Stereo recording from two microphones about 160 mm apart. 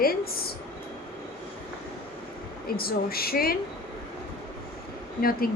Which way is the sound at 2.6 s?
70° left (ahead or behind).